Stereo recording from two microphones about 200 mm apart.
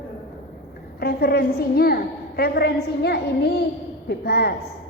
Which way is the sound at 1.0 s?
50° left (ahead or behind).